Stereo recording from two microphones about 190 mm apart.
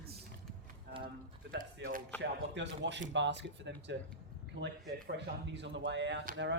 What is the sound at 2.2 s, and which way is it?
Speech, 70° right (ahead or behind).